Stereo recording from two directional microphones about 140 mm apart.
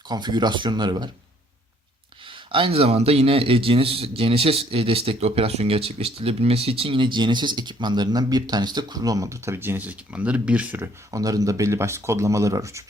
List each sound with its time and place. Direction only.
0.1 s a man's voice: 30° right (ahead or behind)
2.2 s a man's voice: 35° right (ahead or behind); by 10.8 s 10° right (ahead or behind)
11.1 s speech: 25° right (ahead or behind)